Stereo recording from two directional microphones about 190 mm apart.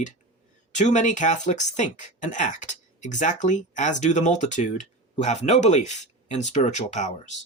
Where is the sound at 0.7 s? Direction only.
40° left (ahead or behind).